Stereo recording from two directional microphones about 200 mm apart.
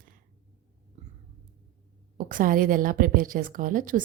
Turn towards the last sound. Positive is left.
turn(degrees=-40)  # may be behind; listen again after turning